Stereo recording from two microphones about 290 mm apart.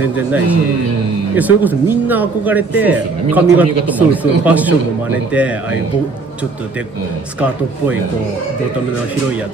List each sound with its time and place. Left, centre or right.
0.0 s speech: centre